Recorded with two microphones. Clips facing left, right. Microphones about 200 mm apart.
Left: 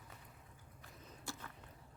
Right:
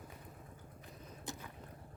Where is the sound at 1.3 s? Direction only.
20° right (ahead or behind).